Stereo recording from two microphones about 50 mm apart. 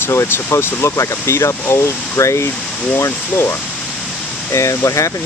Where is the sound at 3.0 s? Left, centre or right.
Left.